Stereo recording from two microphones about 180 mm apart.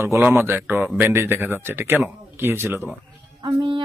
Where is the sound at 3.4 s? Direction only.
25° right (ahead or behind).